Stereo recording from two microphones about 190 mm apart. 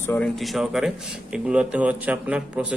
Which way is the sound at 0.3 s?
Centre (ahead or behind).